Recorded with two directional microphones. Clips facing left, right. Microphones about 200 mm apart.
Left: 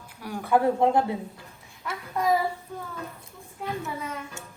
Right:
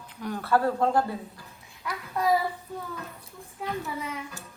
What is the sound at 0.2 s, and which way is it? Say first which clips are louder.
Speech: left 2 dB; 10° left (ahead or behind).